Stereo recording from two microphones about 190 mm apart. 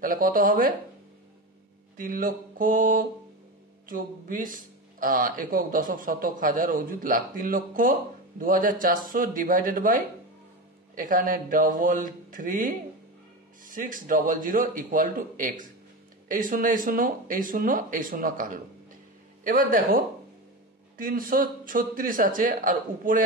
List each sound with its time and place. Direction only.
0.0 s speech: 45° right (ahead or behind)
2.0 s speech: 45° right (ahead or behind)
21.0 s speech: 50° right (ahead or behind)